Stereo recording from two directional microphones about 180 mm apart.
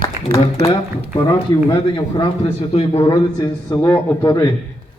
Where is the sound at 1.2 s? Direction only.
20° left (ahead or behind).